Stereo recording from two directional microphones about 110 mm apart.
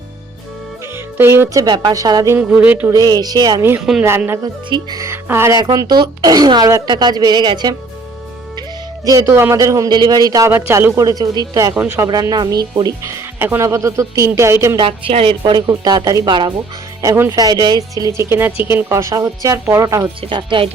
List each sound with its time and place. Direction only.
0.9 s speech: 20° right (ahead or behind)
1.6 s a woman's voice: 40° right (ahead or behind)
2.5 s music: 15° right (ahead or behind)
2.9 s a woman's voice: 35° right (ahead or behind)
3.8 s speech: 5° right (ahead or behind)
4.7 s speech: 35° right (ahead or behind)
5.6 s a woman's voice: 40° right (ahead or behind)
9.0 s a woman's voice: 30° right (ahead or behind)
10.5 s a woman's voice: 20° right (ahead or behind); by 12.9 s 40° right (ahead or behind)
13.0 s speech: 25° right (ahead or behind)
14.8 s a woman's voice: 55° right (ahead or behind); by 18.1 s 35° right (ahead or behind)
18.2 s speech: 20° right (ahead or behind)
20.3 s speech: 50° right (ahead or behind)